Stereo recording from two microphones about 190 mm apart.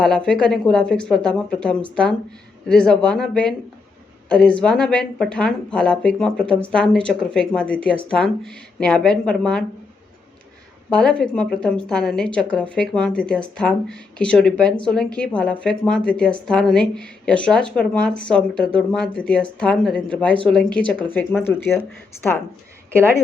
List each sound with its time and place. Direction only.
0.0 s speech: 5° left (ahead or behind)
10.8 s speech: 5° left (ahead or behind)